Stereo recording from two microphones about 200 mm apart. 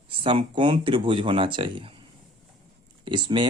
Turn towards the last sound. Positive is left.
turn(degrees=-25)  # may be behind; listen again after turning